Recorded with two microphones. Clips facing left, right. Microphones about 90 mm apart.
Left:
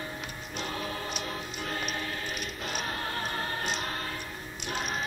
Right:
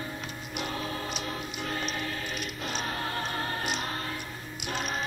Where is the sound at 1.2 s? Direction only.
35° right (ahead or behind).